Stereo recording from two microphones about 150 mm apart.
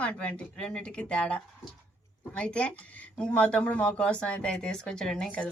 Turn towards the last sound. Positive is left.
turn(degrees=5)  # may be behind; listen again after turning